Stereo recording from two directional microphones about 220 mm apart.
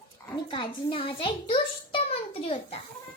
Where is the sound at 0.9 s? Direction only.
25° left (ahead or behind).